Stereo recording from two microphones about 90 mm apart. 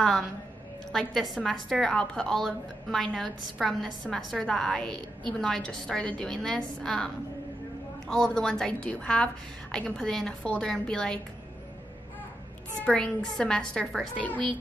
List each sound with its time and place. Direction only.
0.9 s a woman's voice: centre (ahead or behind)
8.1 s a woman's voice: 5° left (ahead or behind)
12.8 s a woman's voice: 10° left (ahead or behind)